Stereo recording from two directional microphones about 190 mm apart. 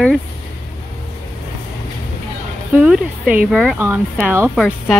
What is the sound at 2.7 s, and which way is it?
Speech, 5° right (ahead or behind).